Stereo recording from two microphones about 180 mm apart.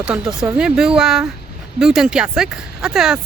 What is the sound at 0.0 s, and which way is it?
Speech, 5° right (ahead or behind).